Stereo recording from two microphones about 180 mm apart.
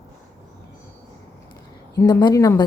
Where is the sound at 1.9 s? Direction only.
20° left (ahead or behind).